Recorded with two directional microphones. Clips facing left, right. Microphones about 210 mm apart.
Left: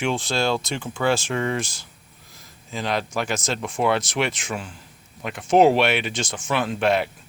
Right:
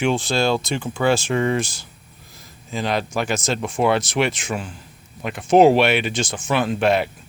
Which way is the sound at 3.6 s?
30° right (ahead or behind).